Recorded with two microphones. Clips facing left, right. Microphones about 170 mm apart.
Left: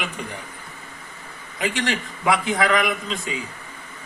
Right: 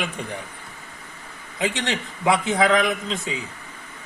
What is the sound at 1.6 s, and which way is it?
Speech, 20° right (ahead or behind).